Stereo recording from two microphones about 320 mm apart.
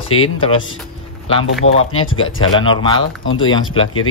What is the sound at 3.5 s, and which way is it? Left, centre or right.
Speech, centre.